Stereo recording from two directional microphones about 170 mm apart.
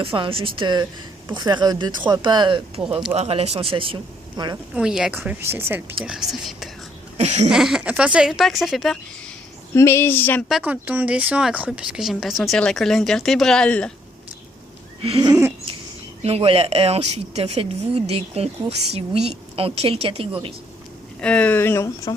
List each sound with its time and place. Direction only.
0.0 s speech: 30° right (ahead or behind)
4.7 s a woman's voice: 5° right (ahead or behind)
6.1 s speech: centre (ahead or behind)
7.2 s speech: 40° right (ahead or behind)
7.5 s speech: 5° right (ahead or behind)
9.7 s speech: 15° left (ahead or behind)
10.5 s speech: 10° right (ahead or behind)
15.2 s a woman's voice: 15° right (ahead or behind)
16.2 s speech: 35° right (ahead or behind)
21.2 s speech: 5° left (ahead or behind)